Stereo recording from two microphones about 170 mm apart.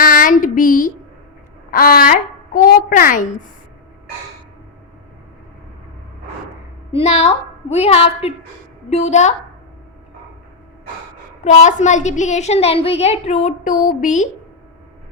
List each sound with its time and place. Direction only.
0.0 s a sound: 55° left (ahead or behind)
6.9 s a woman's voice: 40° left (ahead or behind)
11.4 s a woman's voice: 45° left (ahead or behind)